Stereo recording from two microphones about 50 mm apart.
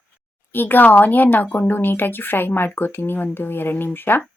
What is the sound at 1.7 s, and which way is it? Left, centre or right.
Speech, left.